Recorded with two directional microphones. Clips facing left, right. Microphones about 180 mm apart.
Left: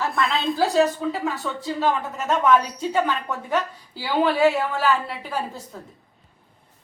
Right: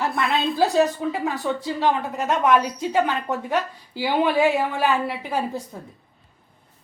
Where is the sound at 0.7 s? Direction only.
15° right (ahead or behind).